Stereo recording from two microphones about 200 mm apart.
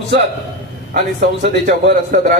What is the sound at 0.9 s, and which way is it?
A man's voice, 50° right (ahead or behind).